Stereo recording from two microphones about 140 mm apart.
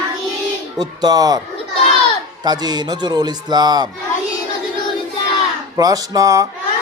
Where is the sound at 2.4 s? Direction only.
30° right (ahead or behind).